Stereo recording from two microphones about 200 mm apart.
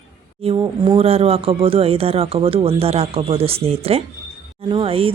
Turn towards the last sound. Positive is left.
turn(degrees=-30)  # may be behind; listen again after turning